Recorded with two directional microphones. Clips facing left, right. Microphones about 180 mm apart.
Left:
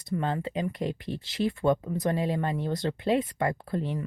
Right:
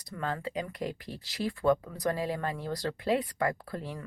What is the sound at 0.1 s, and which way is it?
Speech, 25° left (ahead or behind).